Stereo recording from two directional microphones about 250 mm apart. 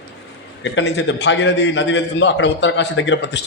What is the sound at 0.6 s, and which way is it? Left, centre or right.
A man's voice, left.